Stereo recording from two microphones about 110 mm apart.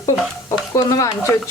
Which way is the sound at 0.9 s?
30° left (ahead or behind).